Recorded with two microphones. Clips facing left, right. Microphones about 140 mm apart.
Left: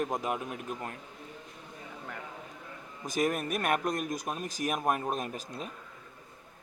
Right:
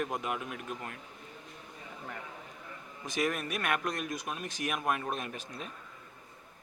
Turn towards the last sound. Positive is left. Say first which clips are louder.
# left 3 dB
turn(degrees=40)  # may be behind; listen again after turning